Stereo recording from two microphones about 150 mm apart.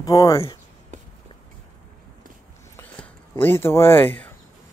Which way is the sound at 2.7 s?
10° left (ahead or behind).